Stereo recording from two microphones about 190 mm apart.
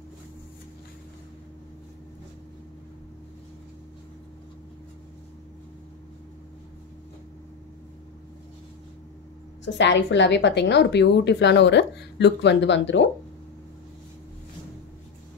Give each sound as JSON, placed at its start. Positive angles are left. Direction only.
{"t": 9.7, "sound": "a woman's voice", "side_deg": 70}